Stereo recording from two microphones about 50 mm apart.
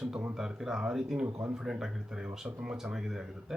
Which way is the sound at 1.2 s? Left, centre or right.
Right.